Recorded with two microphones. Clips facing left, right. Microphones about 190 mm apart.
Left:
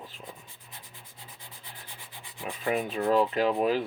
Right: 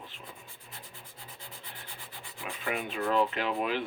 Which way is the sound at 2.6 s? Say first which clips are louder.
Left 5 dB; 35° left (ahead or behind).